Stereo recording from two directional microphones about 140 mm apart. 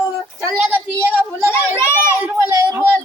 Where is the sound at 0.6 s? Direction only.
10° right (ahead or behind).